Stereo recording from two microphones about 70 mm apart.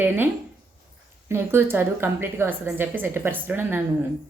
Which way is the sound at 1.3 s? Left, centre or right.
Right.